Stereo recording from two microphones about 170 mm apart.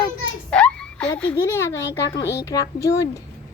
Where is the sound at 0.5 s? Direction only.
5° left (ahead or behind).